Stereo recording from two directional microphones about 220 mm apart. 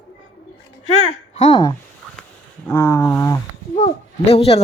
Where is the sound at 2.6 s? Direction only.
10° left (ahead or behind).